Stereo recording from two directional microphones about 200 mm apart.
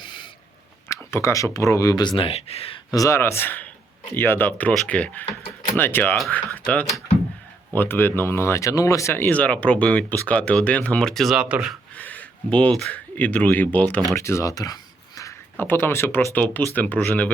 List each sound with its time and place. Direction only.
0.9 s speech: 15° left (ahead or behind); by 2.7 s 30° left (ahead or behind)
2.9 s speech: 15° left (ahead or behind); by 11.8 s 5° right (ahead or behind)
11.9 s speech: 10° left (ahead or behind)